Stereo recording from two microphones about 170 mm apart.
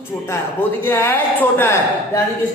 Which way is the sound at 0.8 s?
15° left (ahead or behind).